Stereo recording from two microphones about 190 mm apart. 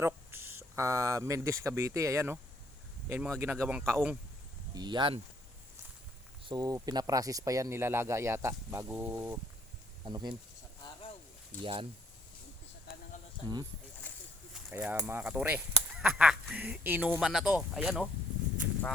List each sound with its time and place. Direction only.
0.0 s speech: 15° right (ahead or behind)
4.7 s speech: 20° right (ahead or behind)
6.4 s speech: 20° right (ahead or behind)
11.6 s speech: 25° right (ahead or behind)
14.0 s a sound: 10° left (ahead or behind)
14.7 s speech: 10° right (ahead or behind)